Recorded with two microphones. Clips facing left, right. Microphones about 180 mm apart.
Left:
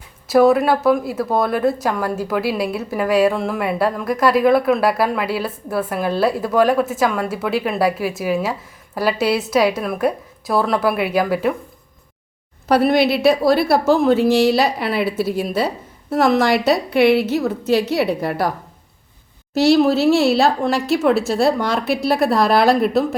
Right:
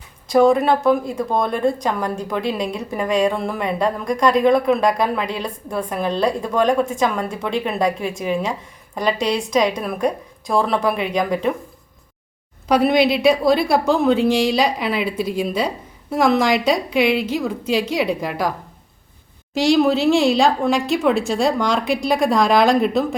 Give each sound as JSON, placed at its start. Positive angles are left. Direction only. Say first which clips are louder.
{"t": 0.3, "sound": "speech", "louder": "left 1 dB", "side_deg": 5}
{"t": 12.6, "sound": "speech", "louder": "left 1 dB", "side_deg": 5}
{"t": 19.6, "sound": "speech", "louder": "left 2 dB", "side_deg": 5}